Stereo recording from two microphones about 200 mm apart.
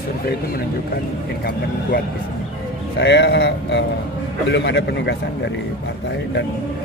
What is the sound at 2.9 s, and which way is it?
Speech, 60° left (ahead or behind).